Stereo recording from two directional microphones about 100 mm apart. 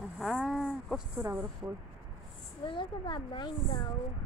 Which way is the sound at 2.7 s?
55° left (ahead or behind).